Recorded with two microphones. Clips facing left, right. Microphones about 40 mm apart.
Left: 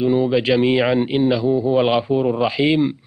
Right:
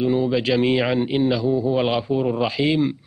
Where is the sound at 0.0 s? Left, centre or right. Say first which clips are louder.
Left 3 dB; centre.